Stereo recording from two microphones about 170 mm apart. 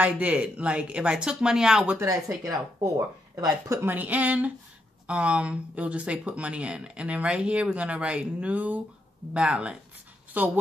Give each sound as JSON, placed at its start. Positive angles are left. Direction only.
{"t": 0.0, "sound": "speech", "side_deg": -10}
{"t": 2.0, "sound": "speech", "side_deg": -20}